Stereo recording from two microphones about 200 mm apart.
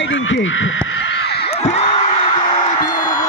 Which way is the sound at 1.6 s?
35° left (ahead or behind).